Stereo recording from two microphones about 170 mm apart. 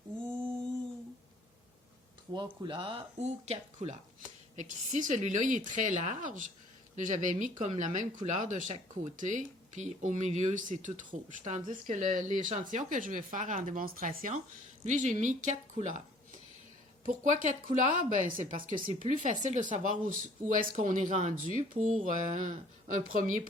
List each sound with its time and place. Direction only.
2.3 s speech: 25° right (ahead or behind); by 16.0 s 45° right (ahead or behind)
17.1 s speech: 45° right (ahead or behind)